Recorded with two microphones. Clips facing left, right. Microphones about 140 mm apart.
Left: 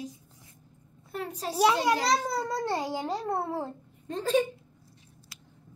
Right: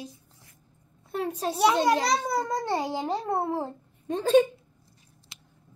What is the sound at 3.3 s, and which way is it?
Speech, 30° right (ahead or behind).